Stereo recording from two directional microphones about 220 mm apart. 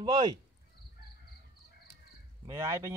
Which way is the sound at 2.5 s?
15° right (ahead or behind).